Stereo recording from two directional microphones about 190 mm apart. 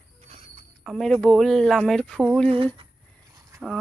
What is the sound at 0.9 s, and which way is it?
Speech, centre (ahead or behind).